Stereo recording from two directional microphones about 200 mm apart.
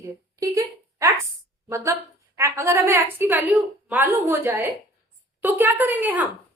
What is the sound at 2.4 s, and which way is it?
A woman's voice, 15° right (ahead or behind).